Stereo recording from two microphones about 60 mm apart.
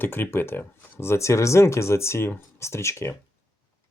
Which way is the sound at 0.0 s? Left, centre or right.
Left.